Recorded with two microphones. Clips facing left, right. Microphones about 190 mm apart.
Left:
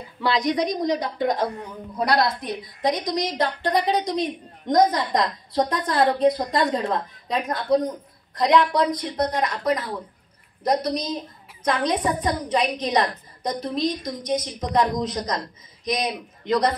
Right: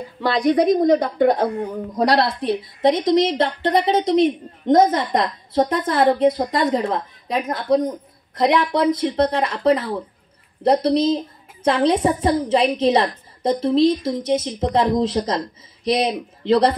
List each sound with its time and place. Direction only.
0.2 s a woman's voice: 50° right (ahead or behind)
1.6 s a woman's voice: 35° right (ahead or behind)